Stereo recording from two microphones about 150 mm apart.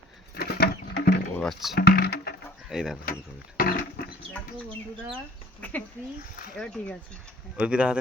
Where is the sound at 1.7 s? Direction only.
90° left.